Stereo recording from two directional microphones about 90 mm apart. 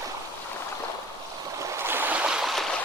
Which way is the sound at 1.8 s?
25° right (ahead or behind).